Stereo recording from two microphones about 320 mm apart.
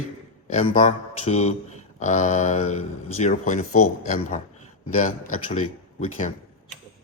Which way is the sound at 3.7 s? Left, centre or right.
Left.